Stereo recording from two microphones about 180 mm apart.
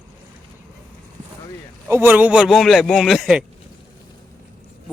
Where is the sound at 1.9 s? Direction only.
10° right (ahead or behind).